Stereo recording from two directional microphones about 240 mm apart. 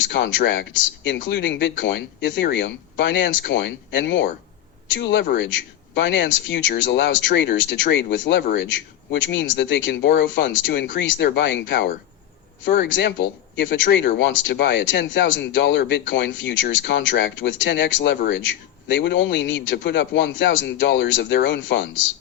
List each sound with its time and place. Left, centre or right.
0.1 s speech: left